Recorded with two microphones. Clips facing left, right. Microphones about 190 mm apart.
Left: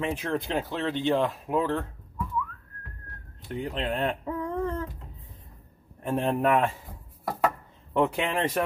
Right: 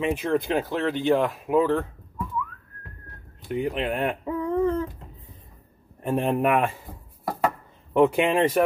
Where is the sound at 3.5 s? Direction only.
15° right (ahead or behind).